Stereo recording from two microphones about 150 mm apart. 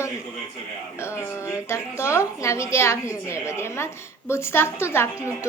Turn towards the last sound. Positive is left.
turn(degrees=15)  # may be behind; listen again after turning